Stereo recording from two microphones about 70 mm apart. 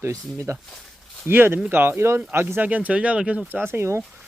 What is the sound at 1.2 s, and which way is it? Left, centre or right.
Speech, right.